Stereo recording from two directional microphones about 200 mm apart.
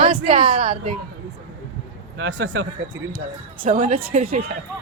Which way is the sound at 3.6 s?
40° right (ahead or behind).